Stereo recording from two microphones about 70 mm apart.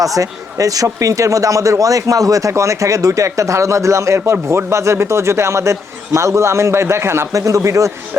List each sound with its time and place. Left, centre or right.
0.0 s speech: right